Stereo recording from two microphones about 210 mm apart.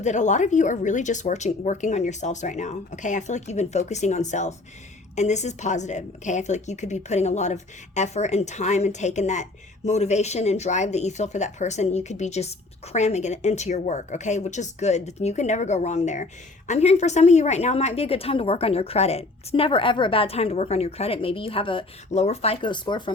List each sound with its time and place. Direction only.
0.0 s a woman's voice: 35° left (ahead or behind)